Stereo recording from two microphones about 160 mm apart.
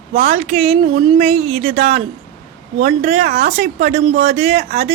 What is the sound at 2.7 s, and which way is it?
A woman's voice, 45° right (ahead or behind).